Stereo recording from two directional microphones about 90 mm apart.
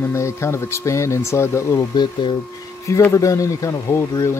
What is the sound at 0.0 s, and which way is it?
Speech, 30° left (ahead or behind).